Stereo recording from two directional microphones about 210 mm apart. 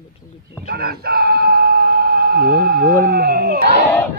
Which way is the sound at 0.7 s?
45° right (ahead or behind).